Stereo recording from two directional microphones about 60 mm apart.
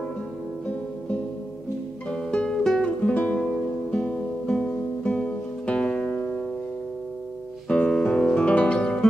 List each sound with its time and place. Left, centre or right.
2.0 s music: centre
2.8 s music: centre
7.6 s music: centre